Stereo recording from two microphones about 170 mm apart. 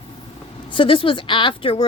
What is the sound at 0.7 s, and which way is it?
A woman's voice, 30° left (ahead or behind).